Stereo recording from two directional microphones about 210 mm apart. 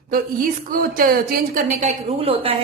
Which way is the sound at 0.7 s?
40° right (ahead or behind).